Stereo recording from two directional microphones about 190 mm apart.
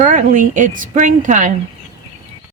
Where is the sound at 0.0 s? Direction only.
45° right (ahead or behind).